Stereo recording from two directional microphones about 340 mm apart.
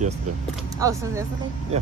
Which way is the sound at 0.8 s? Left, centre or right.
Centre.